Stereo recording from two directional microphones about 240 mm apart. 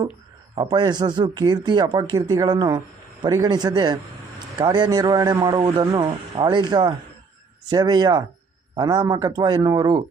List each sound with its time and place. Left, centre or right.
0.5 s speech: centre